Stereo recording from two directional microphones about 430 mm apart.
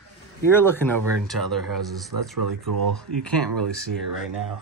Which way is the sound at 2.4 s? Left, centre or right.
Right.